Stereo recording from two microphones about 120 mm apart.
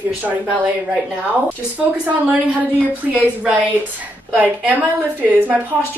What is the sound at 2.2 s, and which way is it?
Speech, 15° right (ahead or behind).